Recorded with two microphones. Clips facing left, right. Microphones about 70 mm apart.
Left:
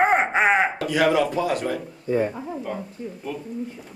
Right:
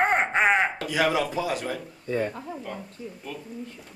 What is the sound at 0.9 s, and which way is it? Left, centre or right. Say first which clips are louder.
A man's voice: left 5 dB; centre.